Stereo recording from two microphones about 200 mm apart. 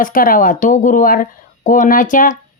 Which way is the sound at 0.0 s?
45° left (ahead or behind).